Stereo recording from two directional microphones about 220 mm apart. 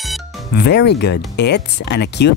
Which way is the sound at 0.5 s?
50° left (ahead or behind).